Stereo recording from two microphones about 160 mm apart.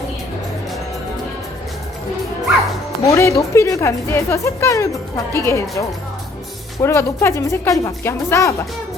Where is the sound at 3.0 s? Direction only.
20° left (ahead or behind).